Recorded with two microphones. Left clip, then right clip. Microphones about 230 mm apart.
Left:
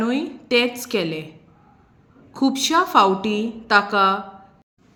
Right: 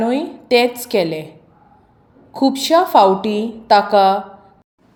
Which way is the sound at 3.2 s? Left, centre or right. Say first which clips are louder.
Right 4 dB; left.